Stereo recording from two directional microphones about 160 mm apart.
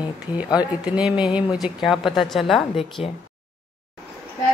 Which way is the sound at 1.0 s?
5° right (ahead or behind).